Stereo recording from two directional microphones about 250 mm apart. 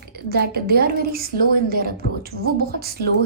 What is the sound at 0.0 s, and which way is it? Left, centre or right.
A woman's voice, right.